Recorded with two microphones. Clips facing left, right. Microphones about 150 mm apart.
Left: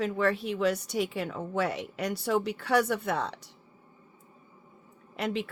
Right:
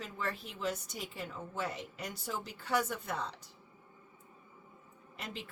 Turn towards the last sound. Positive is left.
turn(degrees=75)  # may be behind; listen again after turning